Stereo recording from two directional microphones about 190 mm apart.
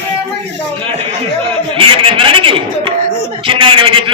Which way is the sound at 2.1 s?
25° right (ahead or behind).